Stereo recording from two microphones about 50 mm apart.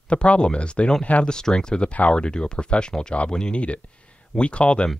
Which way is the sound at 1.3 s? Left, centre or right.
Centre.